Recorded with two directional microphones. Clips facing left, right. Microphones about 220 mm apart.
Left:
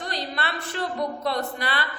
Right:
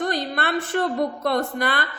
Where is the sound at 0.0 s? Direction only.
50° right (ahead or behind).